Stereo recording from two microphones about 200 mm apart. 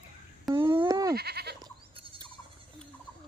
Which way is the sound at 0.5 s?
15° right (ahead or behind).